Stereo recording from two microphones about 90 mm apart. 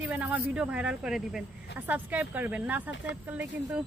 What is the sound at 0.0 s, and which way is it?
Speech, 15° right (ahead or behind).